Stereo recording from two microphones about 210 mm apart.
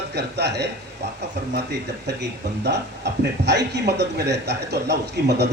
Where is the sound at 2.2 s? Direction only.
55° right (ahead or behind).